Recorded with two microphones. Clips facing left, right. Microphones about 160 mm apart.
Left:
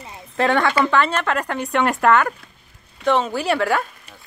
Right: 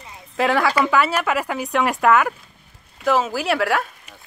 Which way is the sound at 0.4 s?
5° right (ahead or behind).